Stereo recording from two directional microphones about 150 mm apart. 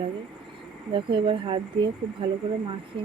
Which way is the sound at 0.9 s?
35° right (ahead or behind).